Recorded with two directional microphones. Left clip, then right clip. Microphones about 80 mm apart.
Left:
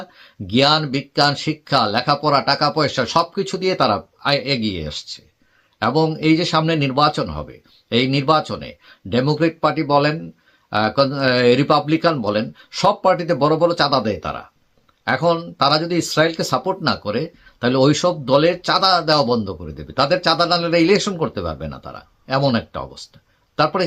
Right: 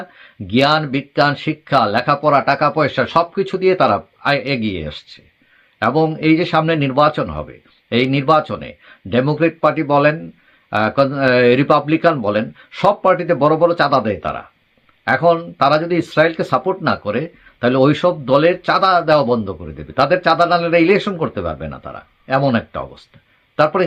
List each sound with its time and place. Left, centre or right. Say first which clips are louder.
0.1 s a man's voice: right 2 dB; left